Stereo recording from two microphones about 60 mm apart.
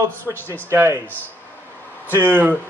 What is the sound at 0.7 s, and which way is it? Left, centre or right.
Speech, right.